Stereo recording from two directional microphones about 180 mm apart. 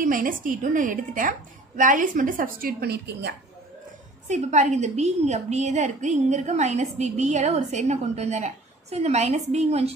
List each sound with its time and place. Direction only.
0.0 s a woman's voice: 50° right (ahead or behind); by 3.3 s 70° right (ahead or behind)
4.3 s a woman's voice: 40° right (ahead or behind)